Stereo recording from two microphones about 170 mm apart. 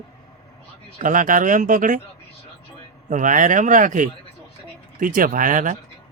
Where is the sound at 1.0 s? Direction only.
50° right (ahead or behind).